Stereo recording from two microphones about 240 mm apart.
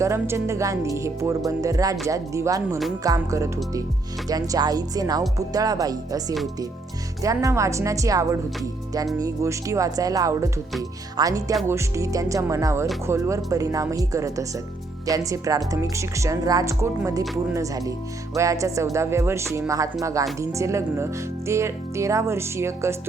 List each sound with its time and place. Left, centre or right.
0.0 s speech: centre